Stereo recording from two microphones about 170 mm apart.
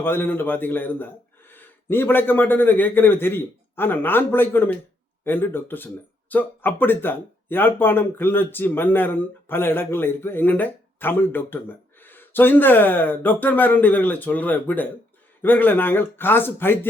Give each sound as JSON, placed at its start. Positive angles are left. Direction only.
{"t": 0.0, "sound": "speech", "side_deg": 10}